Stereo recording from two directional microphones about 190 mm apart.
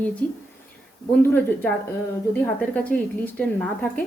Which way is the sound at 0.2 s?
10° left (ahead or behind).